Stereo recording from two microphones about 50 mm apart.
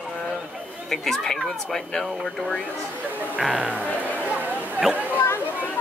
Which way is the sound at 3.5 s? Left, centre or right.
Right.